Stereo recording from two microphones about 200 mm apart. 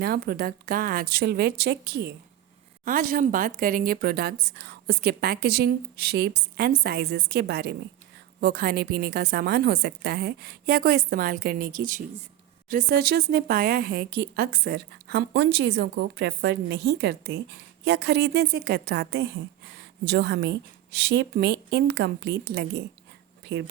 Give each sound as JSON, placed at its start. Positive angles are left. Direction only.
{"t": 0.0, "sound": "a woman's voice", "side_deg": -50}